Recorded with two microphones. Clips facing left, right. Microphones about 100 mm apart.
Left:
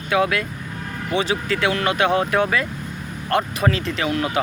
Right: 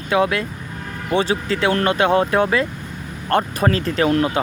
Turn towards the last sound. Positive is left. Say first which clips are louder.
# right 5 dB
turn(degrees=-40)  # may be behind; listen again after turning